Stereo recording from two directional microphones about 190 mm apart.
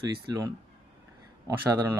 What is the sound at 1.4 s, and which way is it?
Speech, 20° right (ahead or behind).